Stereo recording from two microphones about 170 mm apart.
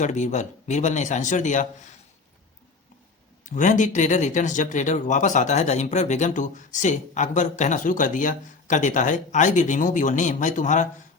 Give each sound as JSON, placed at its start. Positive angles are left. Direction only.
{"t": 0.0, "sound": "speech", "side_deg": 45}
{"t": 3.4, "sound": "speech", "side_deg": 50}